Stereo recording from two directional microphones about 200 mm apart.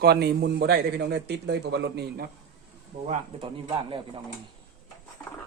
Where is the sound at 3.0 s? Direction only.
35° right (ahead or behind).